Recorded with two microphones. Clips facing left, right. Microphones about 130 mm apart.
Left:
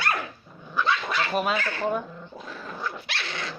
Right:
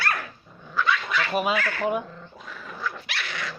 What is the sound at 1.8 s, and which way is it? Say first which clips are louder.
Speech: even; 5° right (ahead or behind).